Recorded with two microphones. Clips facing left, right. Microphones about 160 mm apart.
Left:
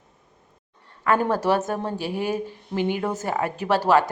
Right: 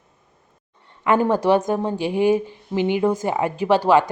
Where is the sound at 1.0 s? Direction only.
15° right (ahead or behind).